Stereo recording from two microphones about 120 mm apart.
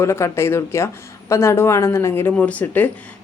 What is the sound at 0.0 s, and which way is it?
Speech, 25° left (ahead or behind).